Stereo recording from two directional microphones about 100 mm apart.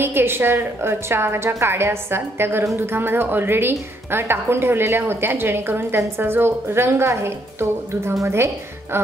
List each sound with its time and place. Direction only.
0.0 s a woman's voice: 25° right (ahead or behind)